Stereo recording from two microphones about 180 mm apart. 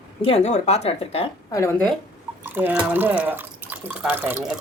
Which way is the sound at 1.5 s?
15° left (ahead or behind).